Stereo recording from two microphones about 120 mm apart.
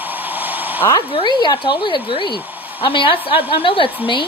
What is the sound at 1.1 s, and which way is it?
A woman's voice, 40° left (ahead or behind).